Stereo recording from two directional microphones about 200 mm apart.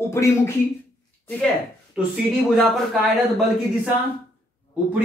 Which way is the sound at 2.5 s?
Centre (ahead or behind).